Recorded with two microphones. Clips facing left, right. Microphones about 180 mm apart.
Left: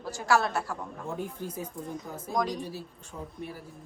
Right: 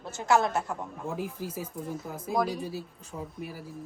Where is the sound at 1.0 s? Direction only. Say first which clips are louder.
Right 1 dB; 5° right (ahead or behind).